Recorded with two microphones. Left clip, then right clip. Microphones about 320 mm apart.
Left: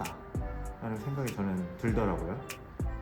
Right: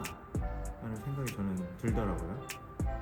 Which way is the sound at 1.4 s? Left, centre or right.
Centre.